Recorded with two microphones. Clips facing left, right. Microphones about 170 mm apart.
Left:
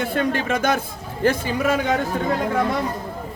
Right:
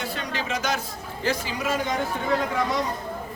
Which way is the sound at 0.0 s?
55° left (ahead or behind).